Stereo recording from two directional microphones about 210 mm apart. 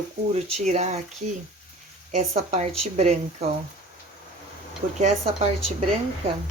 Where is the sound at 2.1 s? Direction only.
35° right (ahead or behind).